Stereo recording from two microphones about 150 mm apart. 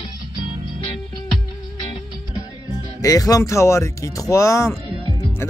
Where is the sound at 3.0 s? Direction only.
25° left (ahead or behind).